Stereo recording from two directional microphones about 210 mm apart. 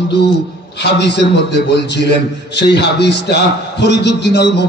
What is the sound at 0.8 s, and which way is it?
A man's voice, 55° left (ahead or behind).